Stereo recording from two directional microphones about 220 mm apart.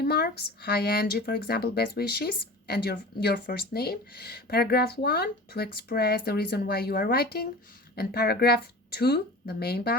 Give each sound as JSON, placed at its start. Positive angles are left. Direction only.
{"t": 0.0, "sound": "speech", "side_deg": 45}